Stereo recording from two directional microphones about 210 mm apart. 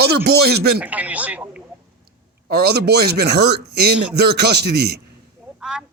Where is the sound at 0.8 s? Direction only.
5° right (ahead or behind).